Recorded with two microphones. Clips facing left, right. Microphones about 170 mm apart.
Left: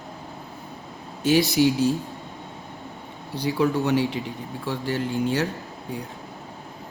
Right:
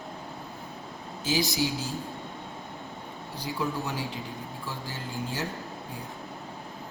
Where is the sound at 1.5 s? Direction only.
65° left (ahead or behind).